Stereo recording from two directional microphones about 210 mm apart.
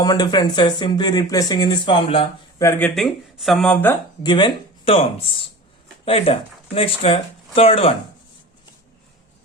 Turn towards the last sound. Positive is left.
turn(degrees=25)  # may be behind; listen again after turning